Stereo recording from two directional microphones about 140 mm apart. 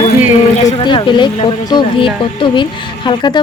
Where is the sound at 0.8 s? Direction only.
35° left (ahead or behind).